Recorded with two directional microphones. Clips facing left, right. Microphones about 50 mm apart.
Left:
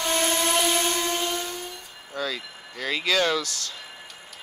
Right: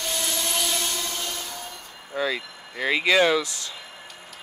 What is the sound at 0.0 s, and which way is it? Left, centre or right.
Vehicle, left.